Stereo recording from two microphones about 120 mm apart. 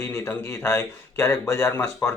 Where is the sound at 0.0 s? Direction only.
20° left (ahead or behind).